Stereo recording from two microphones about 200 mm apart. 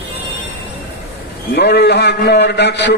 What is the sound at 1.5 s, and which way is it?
A man's voice, 55° left (ahead or behind).